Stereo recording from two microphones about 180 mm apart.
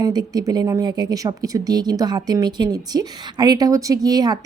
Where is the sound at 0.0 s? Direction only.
20° right (ahead or behind).